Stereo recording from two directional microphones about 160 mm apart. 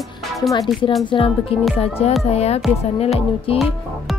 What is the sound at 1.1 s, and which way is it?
Speech, 35° left (ahead or behind).